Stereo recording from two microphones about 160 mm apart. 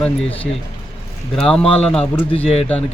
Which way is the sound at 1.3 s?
5° left (ahead or behind).